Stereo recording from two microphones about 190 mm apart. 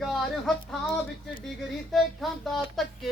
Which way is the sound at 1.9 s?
Centre (ahead or behind).